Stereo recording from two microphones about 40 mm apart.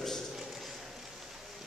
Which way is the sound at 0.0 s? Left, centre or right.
Centre.